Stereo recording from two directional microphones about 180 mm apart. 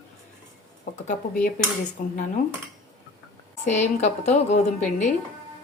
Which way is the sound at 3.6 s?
40° left (ahead or behind).